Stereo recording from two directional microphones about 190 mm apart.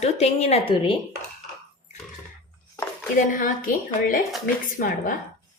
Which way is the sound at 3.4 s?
45° left (ahead or behind).